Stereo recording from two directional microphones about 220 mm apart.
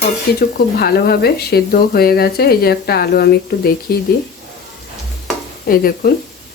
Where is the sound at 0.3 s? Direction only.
45° left (ahead or behind).